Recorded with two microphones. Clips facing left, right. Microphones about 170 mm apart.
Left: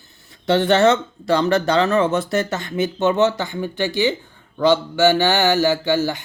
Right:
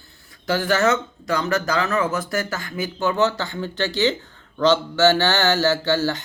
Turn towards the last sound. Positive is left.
turn(degrees=15)  # may be behind; listen again after turning